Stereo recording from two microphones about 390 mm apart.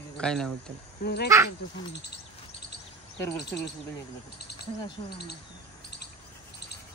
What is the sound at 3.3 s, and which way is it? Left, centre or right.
Speech, left.